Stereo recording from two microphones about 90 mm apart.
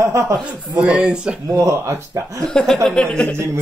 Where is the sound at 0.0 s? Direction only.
30° right (ahead or behind).